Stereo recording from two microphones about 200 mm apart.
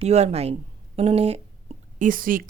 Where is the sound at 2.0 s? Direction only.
45° right (ahead or behind).